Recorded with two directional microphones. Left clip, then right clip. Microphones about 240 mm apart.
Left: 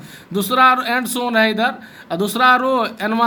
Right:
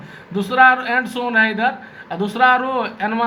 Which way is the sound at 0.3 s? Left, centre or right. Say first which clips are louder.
Right 1 dB; left.